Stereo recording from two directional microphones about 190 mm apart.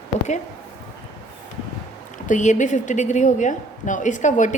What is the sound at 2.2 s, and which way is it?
A woman's voice, 40° left (ahead or behind).